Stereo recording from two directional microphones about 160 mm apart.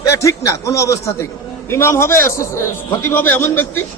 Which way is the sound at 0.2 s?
20° left (ahead or behind).